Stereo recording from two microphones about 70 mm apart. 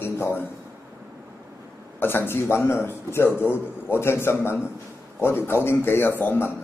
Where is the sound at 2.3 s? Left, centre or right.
Left.